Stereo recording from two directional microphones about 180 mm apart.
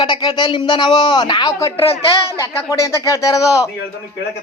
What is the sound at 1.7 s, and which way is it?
Speech, 30° left (ahead or behind).